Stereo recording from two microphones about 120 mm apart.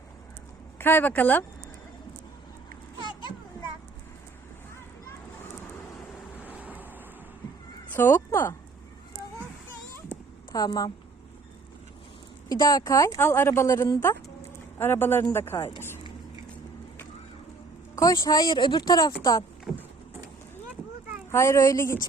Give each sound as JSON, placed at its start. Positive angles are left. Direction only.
{"t": 0.8, "sound": "speech", "side_deg": 15}
{"t": 6.5, "sound": "vehicle", "side_deg": -15}
{"t": 7.9, "sound": "speech", "side_deg": 20}
{"t": 10.5, "sound": "speech", "side_deg": 30}
{"t": 12.5, "sound": "speech", "side_deg": 30}
{"t": 17.9, "sound": "speech", "side_deg": 25}
{"t": 19.7, "sound": "vehicle", "side_deg": -5}
{"t": 21.2, "sound": "speech", "side_deg": 25}